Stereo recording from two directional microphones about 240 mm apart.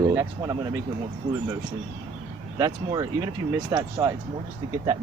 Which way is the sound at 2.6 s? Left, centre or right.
Centre.